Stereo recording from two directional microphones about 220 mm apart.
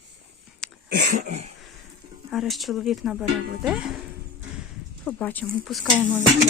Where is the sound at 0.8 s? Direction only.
40° right (ahead or behind).